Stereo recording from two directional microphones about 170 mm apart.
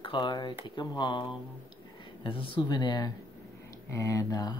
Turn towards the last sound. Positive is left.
turn(degrees=25)  # may be behind; listen again after turning